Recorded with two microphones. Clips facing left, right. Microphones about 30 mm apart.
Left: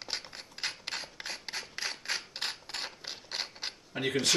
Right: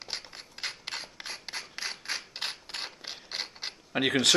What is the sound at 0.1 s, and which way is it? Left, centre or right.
Filing, centre.